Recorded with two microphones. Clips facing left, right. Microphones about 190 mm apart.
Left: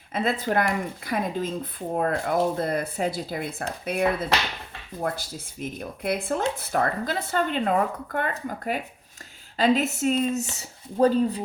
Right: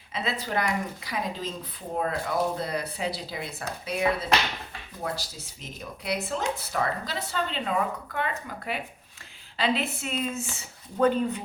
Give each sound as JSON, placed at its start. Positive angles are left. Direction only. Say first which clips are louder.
{"t": 0.1, "sound": "speech", "louder": "left 5 dB", "side_deg": 50}